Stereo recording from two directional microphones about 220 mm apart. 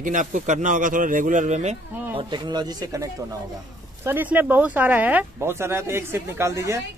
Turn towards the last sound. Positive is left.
turn(degrees=-15)  # may be behind; listen again after turning